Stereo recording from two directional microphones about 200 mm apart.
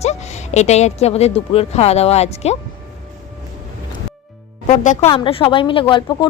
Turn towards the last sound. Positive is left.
turn(degrees=25)  # may be behind; listen again after turning